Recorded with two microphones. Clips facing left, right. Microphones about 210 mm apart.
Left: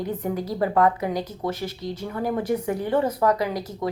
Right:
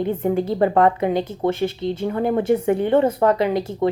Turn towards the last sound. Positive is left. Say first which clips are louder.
# right 7 dB
turn(degrees=-25)  # may be behind; listen again after turning